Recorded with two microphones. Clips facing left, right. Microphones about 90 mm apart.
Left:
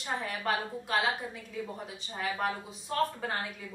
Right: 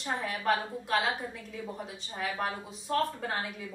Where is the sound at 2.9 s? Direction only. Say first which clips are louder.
Right 1 dB; centre (ahead or behind).